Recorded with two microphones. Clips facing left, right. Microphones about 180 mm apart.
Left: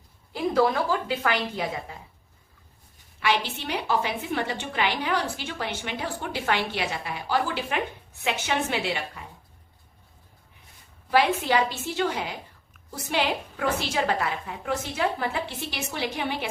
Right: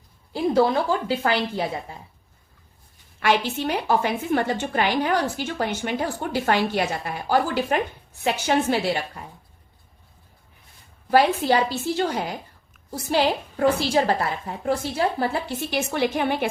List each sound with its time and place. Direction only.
0.3 s speech: 25° right (ahead or behind)
3.2 s a woman's voice: 50° right (ahead or behind)
11.1 s a woman's voice: 40° right (ahead or behind)